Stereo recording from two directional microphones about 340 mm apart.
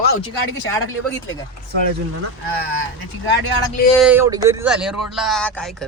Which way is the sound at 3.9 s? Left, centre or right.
Centre.